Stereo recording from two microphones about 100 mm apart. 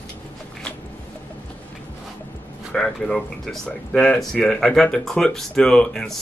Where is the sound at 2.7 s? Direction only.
5° left (ahead or behind).